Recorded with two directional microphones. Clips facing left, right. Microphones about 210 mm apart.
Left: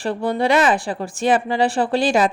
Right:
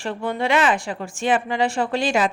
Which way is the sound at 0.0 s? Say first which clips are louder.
Left 4 dB; 35° left (ahead or behind).